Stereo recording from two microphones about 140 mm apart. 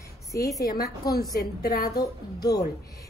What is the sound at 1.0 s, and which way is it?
Speech, 30° left (ahead or behind).